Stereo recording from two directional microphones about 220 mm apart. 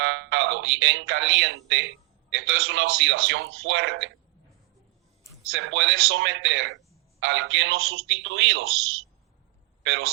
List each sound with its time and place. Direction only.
0.0 s a man's voice: 55° right (ahead or behind)
5.5 s a man's voice: 55° right (ahead or behind)
9.8 s speech: 60° right (ahead or behind)